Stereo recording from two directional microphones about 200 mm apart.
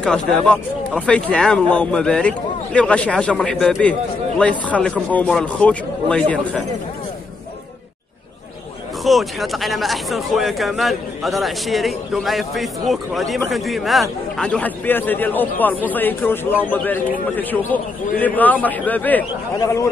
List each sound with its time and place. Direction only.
0.0 s speech: 5° left (ahead or behind)
9.0 s a man's voice: centre (ahead or behind)